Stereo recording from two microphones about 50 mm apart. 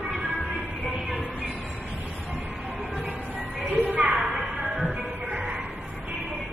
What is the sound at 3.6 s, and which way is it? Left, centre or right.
Music, right.